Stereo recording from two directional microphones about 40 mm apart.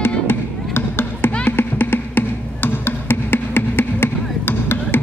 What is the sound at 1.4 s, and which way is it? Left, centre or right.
Music, left.